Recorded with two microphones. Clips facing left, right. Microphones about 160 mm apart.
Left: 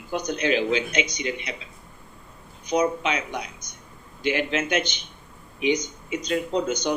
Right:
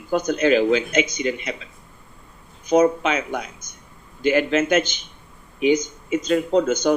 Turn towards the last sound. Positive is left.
turn(degrees=-45)  # may be behind; listen again after turning